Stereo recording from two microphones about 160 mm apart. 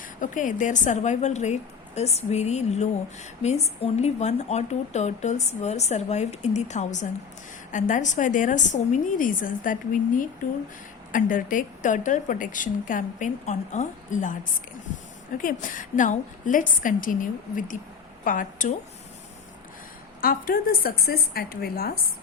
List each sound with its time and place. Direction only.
0.2 s a woman's voice: 55° left (ahead or behind)
15.4 s a woman's voice: 55° left (ahead or behind)
20.2 s a woman's voice: 65° left (ahead or behind)